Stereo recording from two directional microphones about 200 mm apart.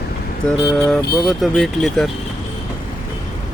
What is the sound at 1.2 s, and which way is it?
Speech, centre (ahead or behind).